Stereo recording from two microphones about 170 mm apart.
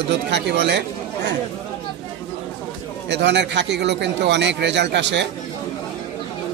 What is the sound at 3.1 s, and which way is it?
Speech, 90° right.